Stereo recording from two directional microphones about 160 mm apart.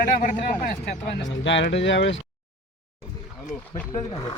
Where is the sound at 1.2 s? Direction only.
90° left.